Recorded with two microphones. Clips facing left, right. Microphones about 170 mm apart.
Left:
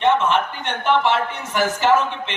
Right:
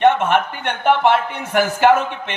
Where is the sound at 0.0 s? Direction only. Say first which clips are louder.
Right 3 dB; 55° right (ahead or behind).